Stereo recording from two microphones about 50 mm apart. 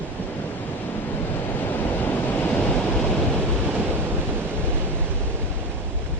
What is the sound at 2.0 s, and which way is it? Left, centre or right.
Waves, left.